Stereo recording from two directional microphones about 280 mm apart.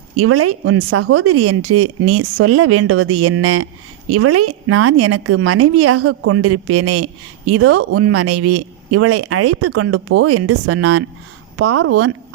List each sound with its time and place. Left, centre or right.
0.2 s a woman's voice: right